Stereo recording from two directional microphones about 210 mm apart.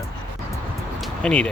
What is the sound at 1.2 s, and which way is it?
Speech, 5° left (ahead or behind).